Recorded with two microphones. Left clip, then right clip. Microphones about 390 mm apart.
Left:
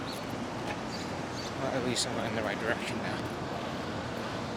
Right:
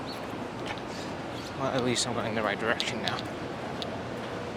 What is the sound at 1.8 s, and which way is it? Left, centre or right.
Speech, right.